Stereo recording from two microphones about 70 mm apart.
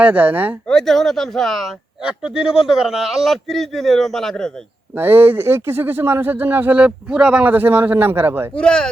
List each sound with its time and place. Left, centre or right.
0.0 s speech: right
0.7 s a man's voice: centre
2.0 s a man's voice: centre
4.9 s speech: right
6.7 s speech: centre
7.4 s speech: right
8.5 s speech: centre